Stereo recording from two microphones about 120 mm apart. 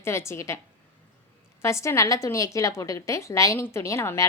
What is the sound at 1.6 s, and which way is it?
A woman's voice, 25° left (ahead or behind).